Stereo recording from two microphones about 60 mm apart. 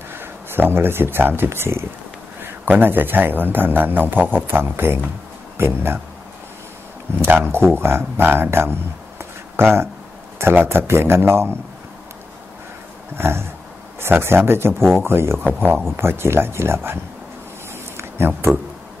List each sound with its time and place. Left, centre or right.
0.2 s speech: right
7.2 s speech: right
9.2 s a sound: right
10.4 s speech: right
13.1 s speech: right
17.9 s a sound: right